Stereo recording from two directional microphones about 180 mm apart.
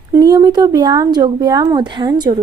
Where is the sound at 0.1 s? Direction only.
20° right (ahead or behind).